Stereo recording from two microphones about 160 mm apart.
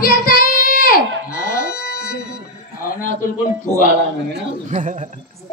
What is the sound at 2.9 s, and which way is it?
Speech, 60° left (ahead or behind).